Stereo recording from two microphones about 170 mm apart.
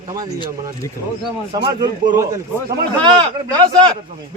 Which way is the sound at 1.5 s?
25° right (ahead or behind).